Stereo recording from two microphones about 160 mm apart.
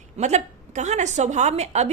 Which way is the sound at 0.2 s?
45° right (ahead or behind).